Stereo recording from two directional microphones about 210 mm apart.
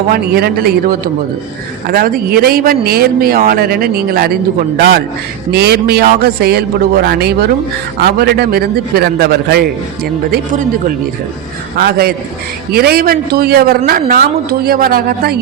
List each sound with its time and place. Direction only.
0.1 s a man's voice: 50° right (ahead or behind)